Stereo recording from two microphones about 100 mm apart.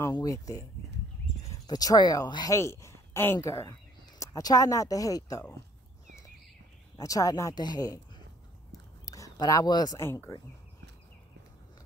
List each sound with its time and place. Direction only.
0.1 s speech: 35° left (ahead or behind)
1.7 s speech: 40° left (ahead or behind)
2.5 s speech: 30° left (ahead or behind)
7.0 s speech: 35° left (ahead or behind)
9.0 s a sound: 35° left (ahead or behind)
9.9 s speech: 25° left (ahead or behind)